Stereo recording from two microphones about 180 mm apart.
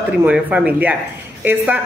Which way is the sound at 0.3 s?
5° right (ahead or behind).